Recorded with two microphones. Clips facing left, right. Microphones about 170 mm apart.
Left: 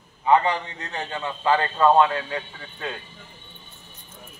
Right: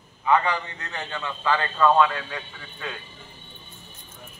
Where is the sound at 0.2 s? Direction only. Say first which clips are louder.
Left 3 dB; 30° left (ahead or behind).